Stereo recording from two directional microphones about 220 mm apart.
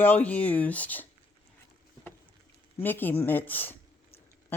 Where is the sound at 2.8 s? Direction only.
10° left (ahead or behind).